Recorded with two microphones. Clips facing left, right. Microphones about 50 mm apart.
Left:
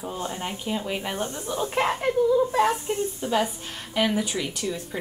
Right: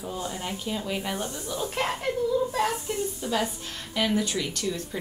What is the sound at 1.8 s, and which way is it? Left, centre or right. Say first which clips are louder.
A woman's voice: left 7 dB; left.